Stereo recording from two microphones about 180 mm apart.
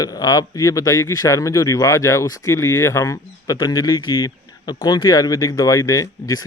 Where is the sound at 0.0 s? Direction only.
20° left (ahead or behind).